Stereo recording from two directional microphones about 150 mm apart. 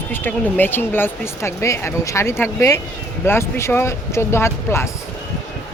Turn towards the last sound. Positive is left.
turn(degrees=15)  # may be behind; listen again after turning